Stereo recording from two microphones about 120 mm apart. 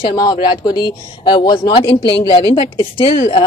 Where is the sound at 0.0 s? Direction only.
35° left (ahead or behind).